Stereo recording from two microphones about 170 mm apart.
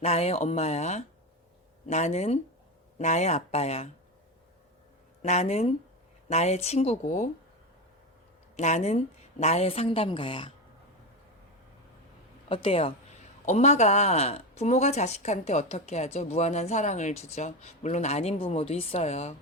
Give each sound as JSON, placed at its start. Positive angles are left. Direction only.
{"t": 0.0, "sound": "speech", "side_deg": 40}
{"t": 5.2, "sound": "speech", "side_deg": 40}
{"t": 8.5, "sound": "speech", "side_deg": 45}
{"t": 12.5, "sound": "speech", "side_deg": 30}